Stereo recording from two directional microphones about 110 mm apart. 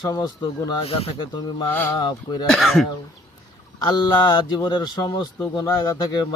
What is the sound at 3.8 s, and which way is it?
Speech, 40° left (ahead or behind).